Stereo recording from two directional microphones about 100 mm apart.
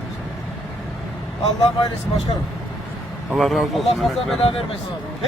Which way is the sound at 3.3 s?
Centre (ahead or behind).